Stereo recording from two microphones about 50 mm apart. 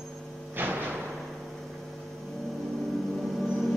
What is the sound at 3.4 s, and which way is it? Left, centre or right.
Music, centre.